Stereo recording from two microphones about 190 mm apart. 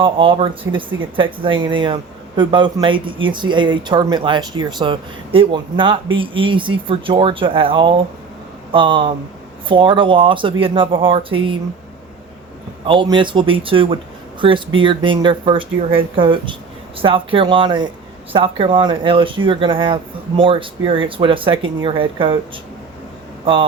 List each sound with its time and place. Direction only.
0.0 s speech: 25° right (ahead or behind)
12.8 s speech: 25° right (ahead or behind)